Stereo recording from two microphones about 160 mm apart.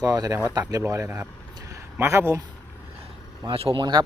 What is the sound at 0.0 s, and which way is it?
Speech, 20° right (ahead or behind).